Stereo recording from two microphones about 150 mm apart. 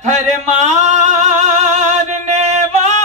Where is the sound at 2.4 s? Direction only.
50° right (ahead or behind).